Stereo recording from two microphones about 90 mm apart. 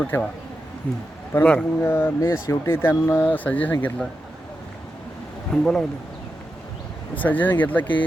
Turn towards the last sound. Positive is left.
turn(degrees=20)  # may be behind; listen again after turning